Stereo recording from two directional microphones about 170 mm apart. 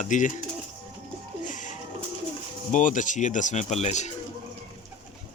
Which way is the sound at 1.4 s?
50° left (ahead or behind).